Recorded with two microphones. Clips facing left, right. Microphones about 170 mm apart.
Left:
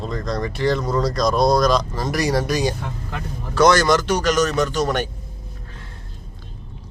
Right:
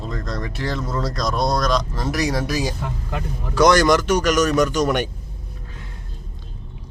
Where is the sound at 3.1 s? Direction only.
15° right (ahead or behind).